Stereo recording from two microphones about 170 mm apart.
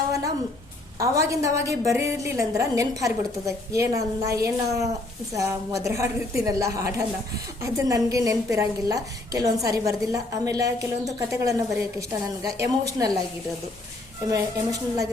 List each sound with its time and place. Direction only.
0.9 s a woman's voice: 20° right (ahead or behind)
14.3 s a woman's voice: 20° right (ahead or behind)